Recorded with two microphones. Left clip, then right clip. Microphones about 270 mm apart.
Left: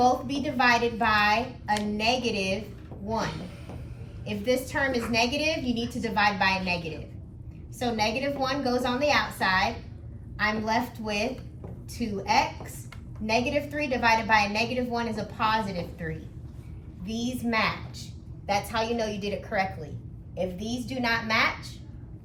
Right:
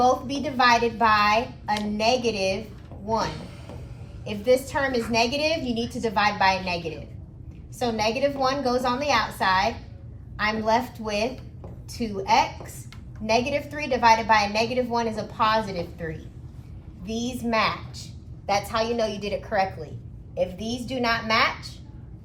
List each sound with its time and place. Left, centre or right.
0.0 s a woman's voice: centre
4.3 s a woman's voice: centre
7.8 s a woman's voice: centre
17.1 s a woman's voice: centre